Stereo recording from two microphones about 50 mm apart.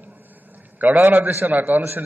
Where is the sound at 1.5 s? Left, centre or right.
Right.